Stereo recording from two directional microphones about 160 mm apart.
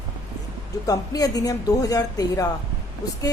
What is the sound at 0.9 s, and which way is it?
A woman's voice, 25° left (ahead or behind).